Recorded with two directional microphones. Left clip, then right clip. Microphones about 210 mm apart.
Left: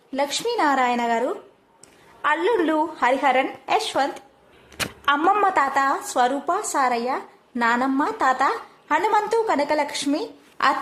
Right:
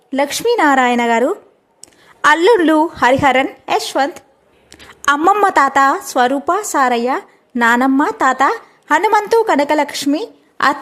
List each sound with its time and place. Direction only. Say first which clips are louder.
0.1 s a woman's voice: right 8 dB; 45° right (ahead or behind)